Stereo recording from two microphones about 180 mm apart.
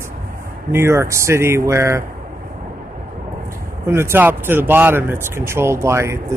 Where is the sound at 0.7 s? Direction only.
15° right (ahead or behind).